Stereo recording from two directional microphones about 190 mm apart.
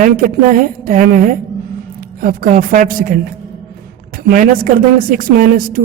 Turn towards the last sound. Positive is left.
turn(degrees=-45)  # may be behind; listen again after turning